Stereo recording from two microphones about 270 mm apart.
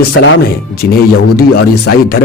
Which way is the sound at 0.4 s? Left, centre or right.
Left.